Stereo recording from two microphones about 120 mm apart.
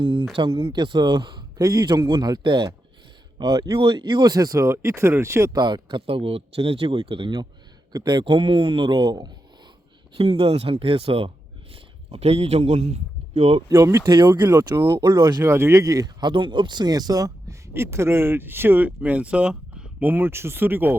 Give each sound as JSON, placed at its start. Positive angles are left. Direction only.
{"t": 0.0, "sound": "speech", "side_deg": -45}
{"t": 5.5, "sound": "speech", "side_deg": -40}
{"t": 10.2, "sound": "speech", "side_deg": -55}
{"t": 13.7, "sound": "speech", "side_deg": -25}
{"t": 14.2, "sound": "speech", "side_deg": -35}
{"t": 14.8, "sound": "speech", "side_deg": -25}
{"t": 15.0, "sound": "speech", "side_deg": -40}
{"t": 15.4, "sound": "speech", "side_deg": -20}